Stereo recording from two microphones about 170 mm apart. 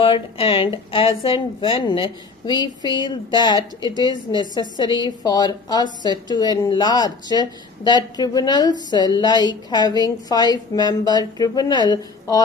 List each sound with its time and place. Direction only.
0.0 s speech: 30° left (ahead or behind)